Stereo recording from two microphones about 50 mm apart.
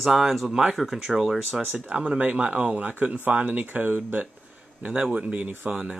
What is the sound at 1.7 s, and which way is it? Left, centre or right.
Speech, right.